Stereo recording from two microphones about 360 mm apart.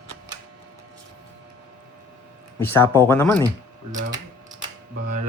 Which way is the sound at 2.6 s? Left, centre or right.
Centre.